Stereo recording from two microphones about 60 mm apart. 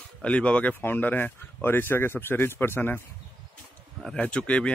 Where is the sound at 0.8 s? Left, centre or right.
Left.